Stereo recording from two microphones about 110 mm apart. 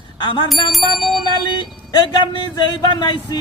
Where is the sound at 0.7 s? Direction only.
Centre (ahead or behind).